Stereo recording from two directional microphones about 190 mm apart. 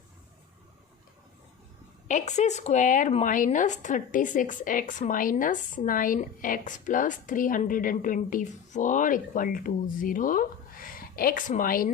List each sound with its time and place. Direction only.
2.0 s a woman's voice: 40° left (ahead or behind)